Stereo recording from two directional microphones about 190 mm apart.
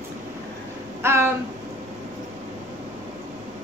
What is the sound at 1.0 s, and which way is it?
Speech, 15° right (ahead or behind).